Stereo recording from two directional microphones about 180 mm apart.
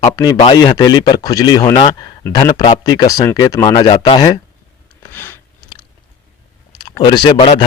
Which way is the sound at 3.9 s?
30° left (ahead or behind).